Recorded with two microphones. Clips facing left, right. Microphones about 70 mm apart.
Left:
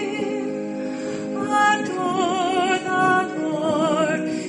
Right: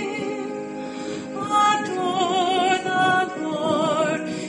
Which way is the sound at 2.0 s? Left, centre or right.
Left.